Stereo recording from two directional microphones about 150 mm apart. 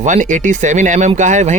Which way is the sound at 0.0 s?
55° right (ahead or behind).